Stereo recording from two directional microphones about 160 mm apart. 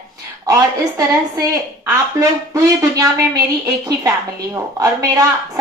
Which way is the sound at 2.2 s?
20° right (ahead or behind).